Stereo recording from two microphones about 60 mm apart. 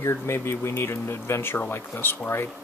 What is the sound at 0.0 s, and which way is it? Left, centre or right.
Speech, left.